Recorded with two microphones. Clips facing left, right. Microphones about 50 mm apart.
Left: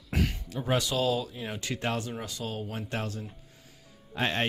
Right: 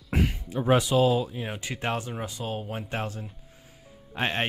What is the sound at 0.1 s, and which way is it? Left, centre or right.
Speech, right.